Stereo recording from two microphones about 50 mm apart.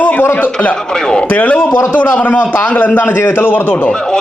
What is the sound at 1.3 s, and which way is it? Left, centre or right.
A man's voice, left.